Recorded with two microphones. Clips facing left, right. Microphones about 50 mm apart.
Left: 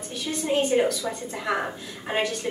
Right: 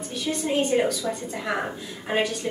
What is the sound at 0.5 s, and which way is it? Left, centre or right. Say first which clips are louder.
A woman's voice: left 1 dB; centre.